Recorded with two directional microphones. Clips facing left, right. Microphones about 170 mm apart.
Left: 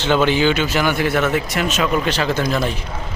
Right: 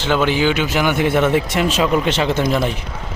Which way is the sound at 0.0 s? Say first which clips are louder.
Left 1 dB; 5° right (ahead or behind).